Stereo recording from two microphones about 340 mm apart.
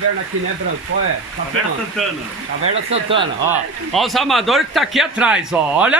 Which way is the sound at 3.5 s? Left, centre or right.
Centre.